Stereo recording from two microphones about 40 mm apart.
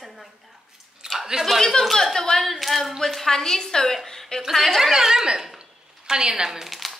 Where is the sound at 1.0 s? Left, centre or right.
Centre.